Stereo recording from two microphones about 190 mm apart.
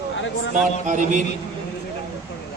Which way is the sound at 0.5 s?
40° right (ahead or behind).